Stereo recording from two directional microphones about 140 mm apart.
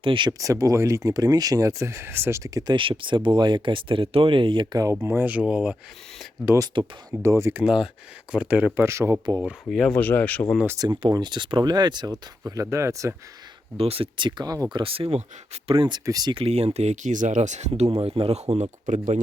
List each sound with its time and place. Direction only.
0.0 s speech: 35° right (ahead or behind); by 7.6 s 20° right (ahead or behind)
8.3 s speech: 10° right (ahead or behind)
9.4 s speech: centre (ahead or behind)
10.7 s speech: 25° right (ahead or behind)
13.7 s speech: 45° right (ahead or behind); by 14.8 s 25° right (ahead or behind)
14.8 s speech: 40° right (ahead or behind)
16.0 s speech: 25° right (ahead or behind)
16.3 s speech: 45° right (ahead or behind)
18.0 s speech: 45° right (ahead or behind); by 19.2 s 60° right (ahead or behind)